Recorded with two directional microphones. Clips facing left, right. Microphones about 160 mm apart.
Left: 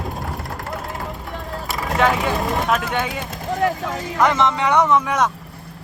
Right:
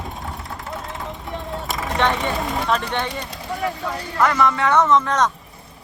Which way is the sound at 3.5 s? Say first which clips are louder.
Left 5 dB; 90° left.